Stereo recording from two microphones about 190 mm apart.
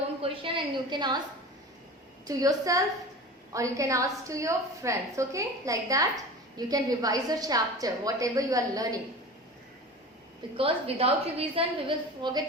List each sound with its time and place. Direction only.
0.2 s a sound: 25° right (ahead or behind)
2.2 s a woman's voice: 20° right (ahead or behind)
10.6 s a woman's voice: 30° right (ahead or behind)